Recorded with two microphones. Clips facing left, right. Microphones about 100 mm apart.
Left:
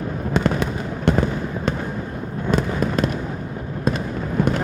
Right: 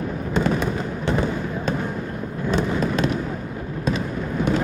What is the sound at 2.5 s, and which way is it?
Fireworks, 45° left (ahead or behind).